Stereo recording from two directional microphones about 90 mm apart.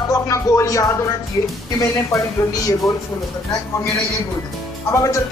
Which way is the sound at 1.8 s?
35° left (ahead or behind).